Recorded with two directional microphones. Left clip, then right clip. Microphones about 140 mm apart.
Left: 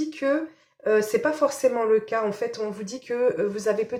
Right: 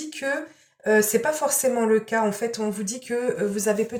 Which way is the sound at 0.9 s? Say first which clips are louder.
Right 1 dB; 40° left (ahead or behind).